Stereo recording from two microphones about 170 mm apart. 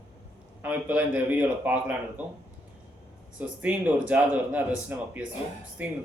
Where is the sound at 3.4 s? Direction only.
10° right (ahead or behind).